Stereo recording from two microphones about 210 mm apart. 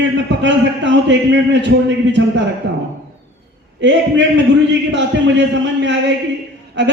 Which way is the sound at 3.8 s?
60° right (ahead or behind).